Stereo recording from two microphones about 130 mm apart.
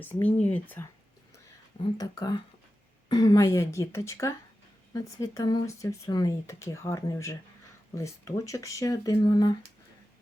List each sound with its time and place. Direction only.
0.0 s speech: 15° left (ahead or behind)
1.8 s speech: 30° left (ahead or behind)